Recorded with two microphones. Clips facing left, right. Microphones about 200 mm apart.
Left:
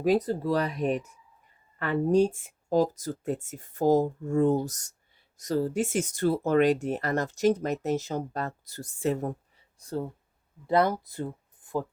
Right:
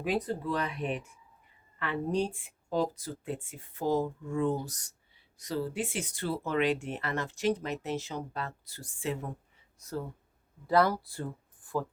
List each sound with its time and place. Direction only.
0.0 s speech: 40° left (ahead or behind)
9.7 s speech: 30° left (ahead or behind)